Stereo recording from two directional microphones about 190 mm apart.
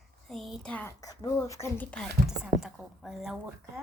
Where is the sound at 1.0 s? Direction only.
20° left (ahead or behind); by 3.4 s 5° right (ahead or behind).